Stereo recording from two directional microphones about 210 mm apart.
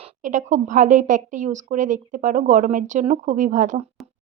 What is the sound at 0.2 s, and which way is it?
Speech, 35° right (ahead or behind).